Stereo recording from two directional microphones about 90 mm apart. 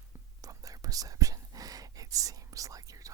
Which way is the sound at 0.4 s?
40° right (ahead or behind).